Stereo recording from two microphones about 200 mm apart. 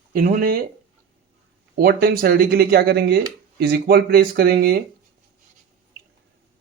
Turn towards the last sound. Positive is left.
turn(degrees=-50)  # may be behind; listen again after turning